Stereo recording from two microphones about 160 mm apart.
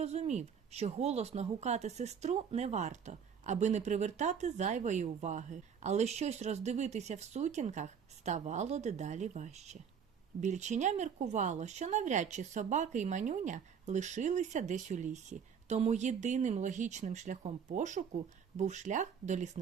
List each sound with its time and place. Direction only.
0.0 s speech: 45° right (ahead or behind)